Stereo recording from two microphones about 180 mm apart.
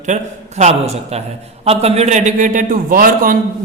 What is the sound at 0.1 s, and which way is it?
A man's voice, 40° right (ahead or behind).